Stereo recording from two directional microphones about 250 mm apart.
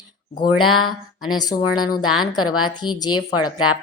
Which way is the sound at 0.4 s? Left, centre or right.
Left.